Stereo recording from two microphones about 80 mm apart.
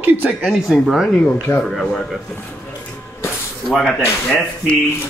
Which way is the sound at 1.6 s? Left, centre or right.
Centre.